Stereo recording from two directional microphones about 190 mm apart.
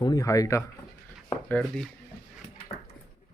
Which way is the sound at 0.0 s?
15° left (ahead or behind).